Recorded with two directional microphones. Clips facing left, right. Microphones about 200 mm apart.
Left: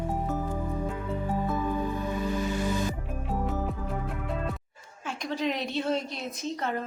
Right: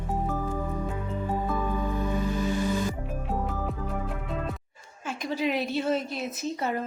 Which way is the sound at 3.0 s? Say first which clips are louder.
Even; centre (ahead or behind).